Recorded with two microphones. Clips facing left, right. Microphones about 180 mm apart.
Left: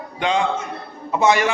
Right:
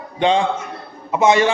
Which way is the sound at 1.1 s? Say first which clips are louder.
Right 3 dB; 20° right (ahead or behind).